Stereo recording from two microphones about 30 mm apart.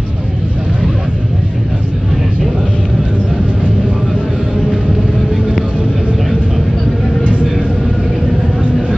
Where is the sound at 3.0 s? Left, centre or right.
Right.